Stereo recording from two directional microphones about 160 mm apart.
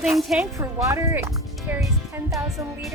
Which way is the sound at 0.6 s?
15° right (ahead or behind).